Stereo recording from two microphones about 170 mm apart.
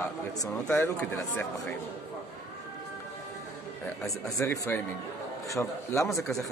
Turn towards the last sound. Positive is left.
turn(degrees=20)  # may be behind; listen again after turning